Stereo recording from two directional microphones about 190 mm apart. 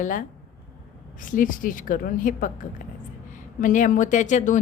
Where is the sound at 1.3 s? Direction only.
45° left (ahead or behind).